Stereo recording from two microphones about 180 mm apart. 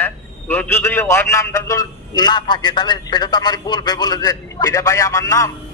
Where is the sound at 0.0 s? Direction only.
10° left (ahead or behind).